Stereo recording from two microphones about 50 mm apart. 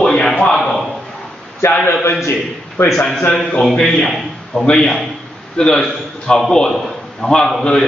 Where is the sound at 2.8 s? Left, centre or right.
Left.